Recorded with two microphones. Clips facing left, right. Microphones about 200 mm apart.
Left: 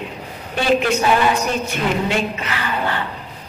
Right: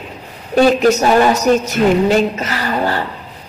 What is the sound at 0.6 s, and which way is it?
A man's voice, 40° right (ahead or behind).